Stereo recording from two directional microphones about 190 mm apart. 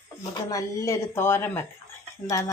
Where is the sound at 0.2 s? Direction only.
15° left (ahead or behind).